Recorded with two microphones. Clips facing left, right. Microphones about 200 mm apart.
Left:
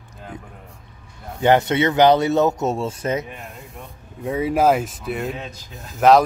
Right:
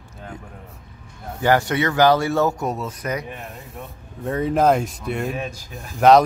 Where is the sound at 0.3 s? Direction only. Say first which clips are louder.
Even; 20° left (ahead or behind).